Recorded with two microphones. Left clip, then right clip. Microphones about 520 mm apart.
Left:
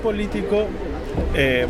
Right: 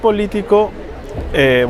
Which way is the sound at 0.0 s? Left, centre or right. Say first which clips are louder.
Right 8 dB; right.